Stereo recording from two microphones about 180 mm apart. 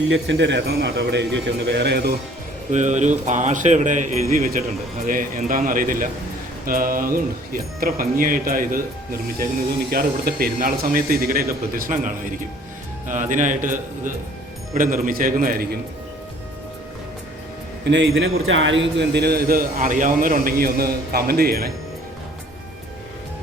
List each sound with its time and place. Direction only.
0.1 s a man's voice: 90° right; by 2.1 s 65° right (ahead or behind)
2.7 s a man's voice: 40° right (ahead or behind)
13.3 s speech: 45° right (ahead or behind)
17.8 s a man's voice: 90° right; by 21.7 s 55° right (ahead or behind)